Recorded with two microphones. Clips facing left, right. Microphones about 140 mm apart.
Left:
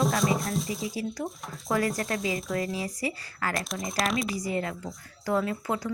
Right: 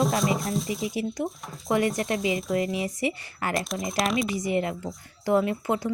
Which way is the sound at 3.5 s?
Centre (ahead or behind).